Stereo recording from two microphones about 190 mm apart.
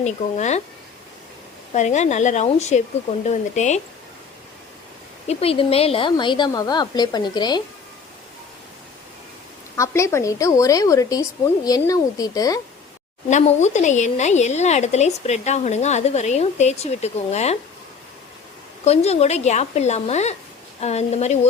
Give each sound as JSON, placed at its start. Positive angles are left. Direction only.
{"t": 0.0, "sound": "a woman's voice", "side_deg": 40}
{"t": 1.7, "sound": "a woman's voice", "side_deg": 40}
{"t": 5.3, "sound": "a woman's voice", "side_deg": 30}
{"t": 9.7, "sound": "a woman's voice", "side_deg": 15}
{"t": 13.3, "sound": "a woman's voice", "side_deg": 40}
{"t": 18.9, "sound": "a woman's voice", "side_deg": 35}